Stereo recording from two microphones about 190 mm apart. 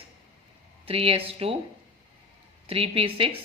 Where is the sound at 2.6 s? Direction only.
30° right (ahead or behind).